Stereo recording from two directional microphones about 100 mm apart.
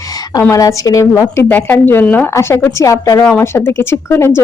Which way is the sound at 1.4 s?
20° left (ahead or behind).